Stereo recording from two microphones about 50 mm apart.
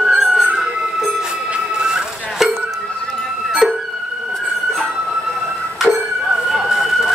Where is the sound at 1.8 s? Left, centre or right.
Centre.